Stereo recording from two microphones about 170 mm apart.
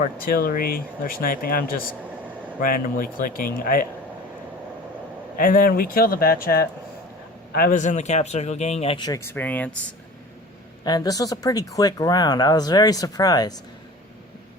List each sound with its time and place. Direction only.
0.0 s speech: 60° left (ahead or behind)
5.4 s speech: 55° left (ahead or behind); by 9.0 s 35° left (ahead or behind)
9.0 s speech: 15° left (ahead or behind)
10.8 s speech: 25° left (ahead or behind)